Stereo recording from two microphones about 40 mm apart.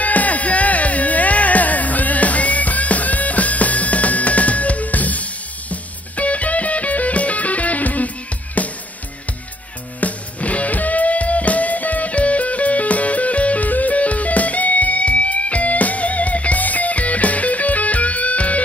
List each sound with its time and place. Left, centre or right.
0.0 s music: left
9.9 s music: left